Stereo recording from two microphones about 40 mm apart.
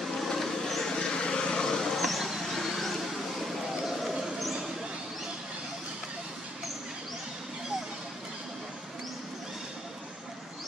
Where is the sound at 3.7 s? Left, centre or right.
Centre.